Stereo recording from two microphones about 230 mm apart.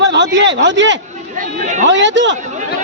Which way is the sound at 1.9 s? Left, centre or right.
Right.